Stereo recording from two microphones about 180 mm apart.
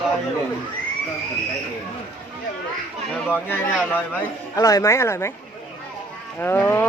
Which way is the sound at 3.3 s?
10° left (ahead or behind).